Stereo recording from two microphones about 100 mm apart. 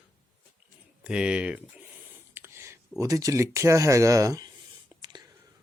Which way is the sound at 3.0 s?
35° right (ahead or behind).